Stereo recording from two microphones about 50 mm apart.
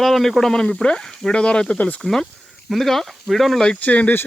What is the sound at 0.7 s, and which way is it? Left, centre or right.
Speech, centre.